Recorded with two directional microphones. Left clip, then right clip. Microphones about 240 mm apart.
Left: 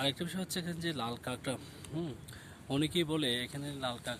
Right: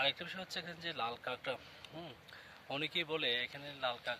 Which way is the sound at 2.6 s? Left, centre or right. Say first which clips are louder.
Left 4 dB; centre.